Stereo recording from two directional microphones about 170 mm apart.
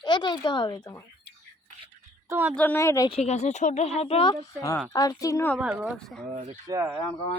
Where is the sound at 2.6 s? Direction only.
10° left (ahead or behind).